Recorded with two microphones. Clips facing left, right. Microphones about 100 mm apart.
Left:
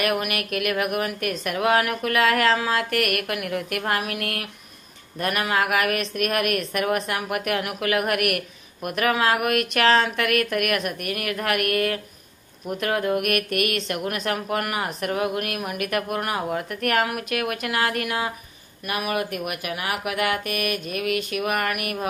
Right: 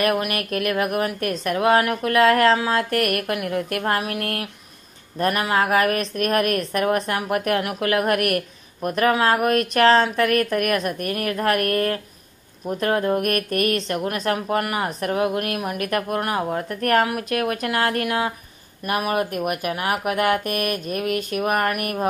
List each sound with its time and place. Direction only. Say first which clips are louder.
0.0 s a woman's voice: right 3 dB; 30° right (ahead or behind)